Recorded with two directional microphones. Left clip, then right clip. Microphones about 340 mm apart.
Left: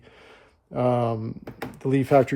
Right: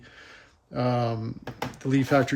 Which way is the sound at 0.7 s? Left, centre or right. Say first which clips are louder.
Left 4 dB; centre.